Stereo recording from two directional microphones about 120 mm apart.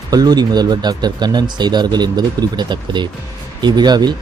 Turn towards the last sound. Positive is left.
turn(degrees=-35)  # may be behind; listen again after turning